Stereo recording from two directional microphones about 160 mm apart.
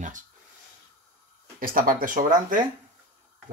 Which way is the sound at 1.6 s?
60° right (ahead or behind).